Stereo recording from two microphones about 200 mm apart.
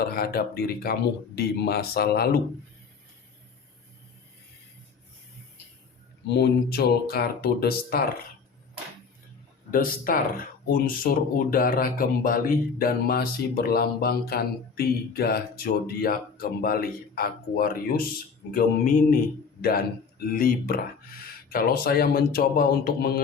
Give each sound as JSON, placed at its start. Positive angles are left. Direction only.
{"t": 0.0, "sound": "speech", "side_deg": 50}
{"t": 6.2, "sound": "speech", "side_deg": 55}
{"t": 9.7, "sound": "speech", "side_deg": 45}